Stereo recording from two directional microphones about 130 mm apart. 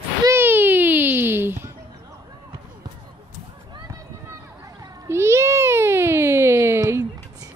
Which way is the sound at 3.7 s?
25° right (ahead or behind).